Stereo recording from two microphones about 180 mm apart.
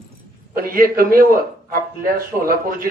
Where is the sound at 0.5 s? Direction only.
55° right (ahead or behind).